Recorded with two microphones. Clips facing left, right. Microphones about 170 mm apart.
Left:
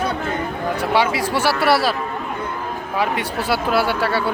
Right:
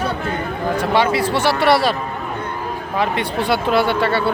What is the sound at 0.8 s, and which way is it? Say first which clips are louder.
Speech: right 2 dB; 10° left (ahead or behind).